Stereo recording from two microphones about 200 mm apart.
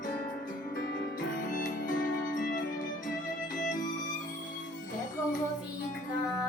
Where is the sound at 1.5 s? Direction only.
40° left (ahead or behind).